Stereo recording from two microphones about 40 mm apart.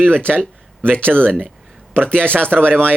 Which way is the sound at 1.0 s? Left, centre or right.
Right.